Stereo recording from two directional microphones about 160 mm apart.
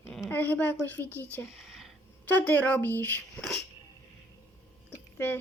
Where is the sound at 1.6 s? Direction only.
Centre (ahead or behind).